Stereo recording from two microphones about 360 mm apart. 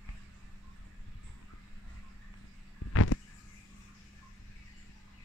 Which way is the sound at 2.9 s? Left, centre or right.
Left.